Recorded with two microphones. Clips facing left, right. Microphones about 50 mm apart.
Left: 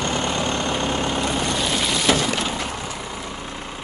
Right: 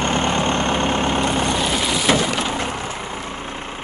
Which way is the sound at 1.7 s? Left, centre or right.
Centre.